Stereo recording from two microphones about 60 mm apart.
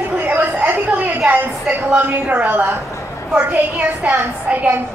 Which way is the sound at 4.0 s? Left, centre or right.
Right.